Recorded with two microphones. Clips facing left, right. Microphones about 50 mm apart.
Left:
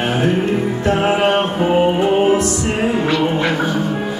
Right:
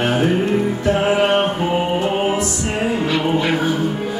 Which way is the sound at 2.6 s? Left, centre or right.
Centre.